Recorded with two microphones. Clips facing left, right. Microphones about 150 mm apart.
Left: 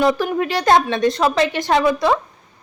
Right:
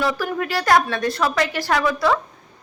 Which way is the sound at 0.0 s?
20° left (ahead or behind).